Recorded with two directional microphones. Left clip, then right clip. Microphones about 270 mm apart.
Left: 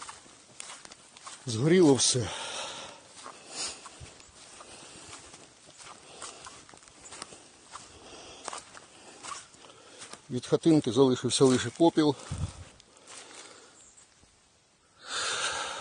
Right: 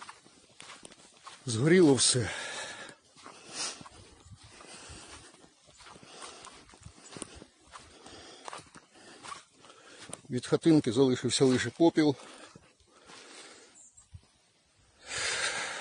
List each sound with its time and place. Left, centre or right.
0.6 s horse: left
1.5 s speech: centre
3.3 s dog: centre
4.7 s a sound: centre
8.1 s a sound: centre
9.2 s dog: left
10.3 s speech: centre
15.0 s snort: centre